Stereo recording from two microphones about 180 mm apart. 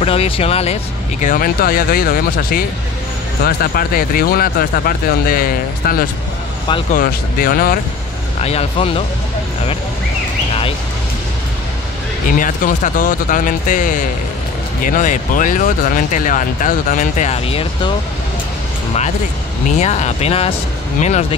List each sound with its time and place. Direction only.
0.0 s speech: 35° left (ahead or behind)
1.2 s speech: 50° left (ahead or behind)
8.4 s speech: 35° left (ahead or behind)
12.3 s speech: 50° left (ahead or behind); by 17.9 s 30° left (ahead or behind)
19.7 s speech: 40° left (ahead or behind)